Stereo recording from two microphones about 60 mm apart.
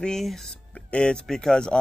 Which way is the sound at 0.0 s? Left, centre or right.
Centre.